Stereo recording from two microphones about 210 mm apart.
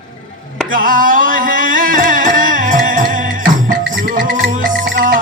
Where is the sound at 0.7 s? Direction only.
40° right (ahead or behind).